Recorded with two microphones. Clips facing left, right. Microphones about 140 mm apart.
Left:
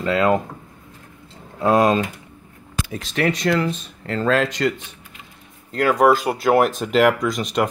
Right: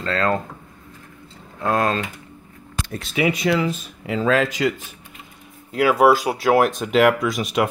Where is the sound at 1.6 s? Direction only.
15° left (ahead or behind).